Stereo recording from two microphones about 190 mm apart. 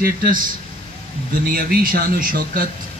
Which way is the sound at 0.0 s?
50° right (ahead or behind).